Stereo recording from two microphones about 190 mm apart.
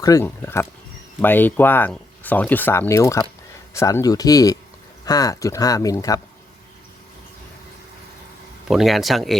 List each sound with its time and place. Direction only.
0.0 s speech: 15° left (ahead or behind)
8.6 s speech: centre (ahead or behind)